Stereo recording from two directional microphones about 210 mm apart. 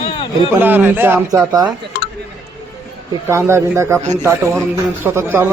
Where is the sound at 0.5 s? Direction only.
10° right (ahead or behind).